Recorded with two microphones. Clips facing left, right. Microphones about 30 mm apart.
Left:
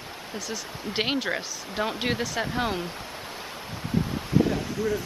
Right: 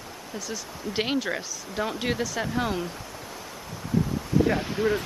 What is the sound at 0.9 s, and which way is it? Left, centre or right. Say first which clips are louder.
Speech: even; left.